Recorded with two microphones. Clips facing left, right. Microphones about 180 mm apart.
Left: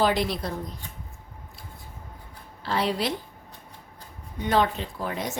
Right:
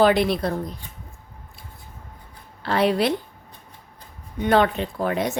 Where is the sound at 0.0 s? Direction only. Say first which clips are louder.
Right 6 dB; 60° right (ahead or behind).